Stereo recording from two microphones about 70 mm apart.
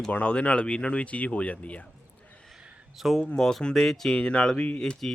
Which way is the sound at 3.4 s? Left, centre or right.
Centre.